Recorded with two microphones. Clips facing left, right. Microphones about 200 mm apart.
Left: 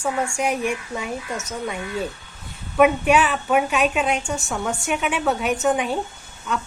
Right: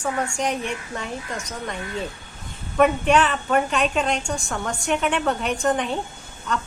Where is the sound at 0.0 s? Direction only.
10° left (ahead or behind).